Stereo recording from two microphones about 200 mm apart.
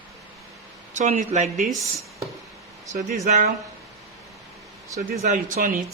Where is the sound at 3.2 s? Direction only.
35° right (ahead or behind).